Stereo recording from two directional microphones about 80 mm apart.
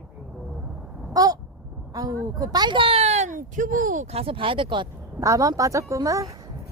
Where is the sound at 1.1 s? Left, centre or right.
Right.